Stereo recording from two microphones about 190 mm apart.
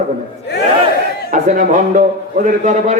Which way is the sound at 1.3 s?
45° right (ahead or behind).